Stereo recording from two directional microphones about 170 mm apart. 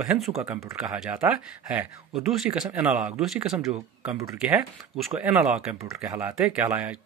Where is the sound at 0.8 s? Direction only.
5° right (ahead or behind).